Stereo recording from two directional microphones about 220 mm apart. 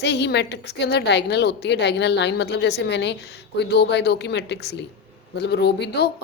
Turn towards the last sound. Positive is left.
turn(degrees=50)  # may be behind; listen again after turning